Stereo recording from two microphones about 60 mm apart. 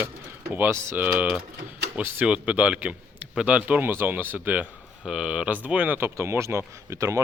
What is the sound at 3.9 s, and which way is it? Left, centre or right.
Speech, right.